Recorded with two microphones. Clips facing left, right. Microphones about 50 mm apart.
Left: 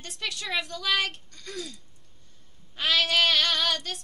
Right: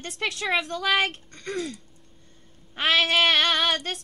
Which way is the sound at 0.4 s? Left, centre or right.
Right.